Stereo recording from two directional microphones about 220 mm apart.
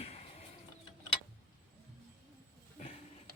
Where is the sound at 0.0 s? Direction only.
30° left (ahead or behind).